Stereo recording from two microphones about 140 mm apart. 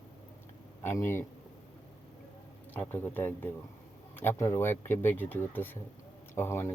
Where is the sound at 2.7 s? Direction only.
15° left (ahead or behind).